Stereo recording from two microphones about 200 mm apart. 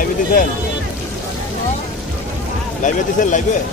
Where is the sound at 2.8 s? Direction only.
40° left (ahead or behind).